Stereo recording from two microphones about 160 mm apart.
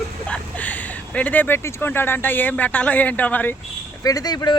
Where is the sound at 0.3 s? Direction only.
10° left (ahead or behind).